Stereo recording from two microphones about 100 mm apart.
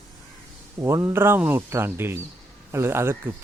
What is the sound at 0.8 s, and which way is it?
Speech, 25° right (ahead or behind).